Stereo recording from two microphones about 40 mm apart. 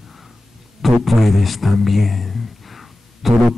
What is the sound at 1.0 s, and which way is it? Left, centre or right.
Speech, centre.